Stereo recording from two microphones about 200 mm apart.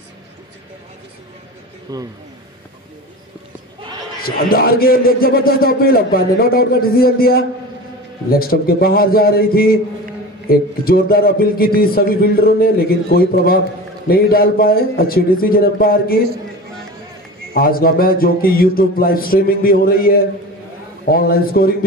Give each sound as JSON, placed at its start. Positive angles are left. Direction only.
{"t": 1.9, "sound": "speech", "side_deg": -20}
{"t": 4.2, "sound": "a man's voice", "side_deg": 50}
{"t": 17.6, "sound": "a man's voice", "side_deg": 45}